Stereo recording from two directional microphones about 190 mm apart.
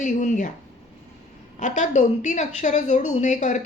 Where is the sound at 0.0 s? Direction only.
40° left (ahead or behind).